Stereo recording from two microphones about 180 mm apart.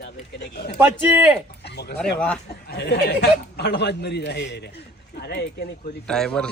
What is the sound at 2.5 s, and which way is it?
A man's voice, 60° left (ahead or behind).